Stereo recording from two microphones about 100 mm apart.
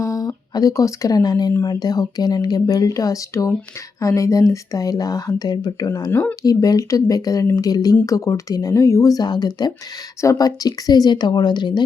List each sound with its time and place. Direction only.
0.0 s speech: 35° left (ahead or behind)
6.1 s speech: 20° left (ahead or behind)
6.4 s speech: 40° left (ahead or behind)